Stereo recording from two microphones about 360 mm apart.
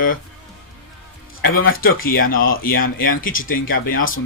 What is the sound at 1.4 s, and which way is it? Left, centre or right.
Speech, left.